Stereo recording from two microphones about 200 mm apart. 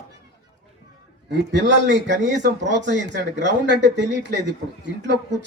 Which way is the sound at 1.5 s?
65° right (ahead or behind).